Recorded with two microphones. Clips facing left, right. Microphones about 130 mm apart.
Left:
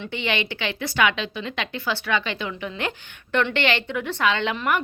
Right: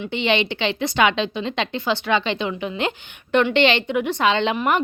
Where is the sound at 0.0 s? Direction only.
20° right (ahead or behind).